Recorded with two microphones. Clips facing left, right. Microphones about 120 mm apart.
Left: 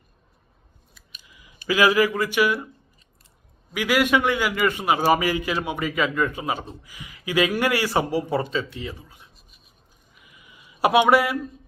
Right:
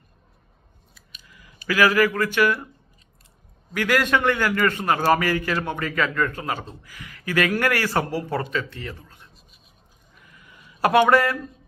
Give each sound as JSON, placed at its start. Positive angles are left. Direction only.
{"t": 1.3, "sound": "speech", "side_deg": 15}
{"t": 3.7, "sound": "a man's voice", "side_deg": 10}
{"t": 10.2, "sound": "a sound", "side_deg": 15}